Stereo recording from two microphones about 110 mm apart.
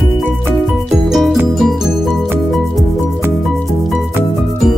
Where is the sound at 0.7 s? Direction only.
Centre (ahead or behind).